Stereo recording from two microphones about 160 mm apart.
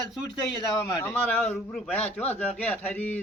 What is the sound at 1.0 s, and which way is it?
A man's voice, 10° left (ahead or behind).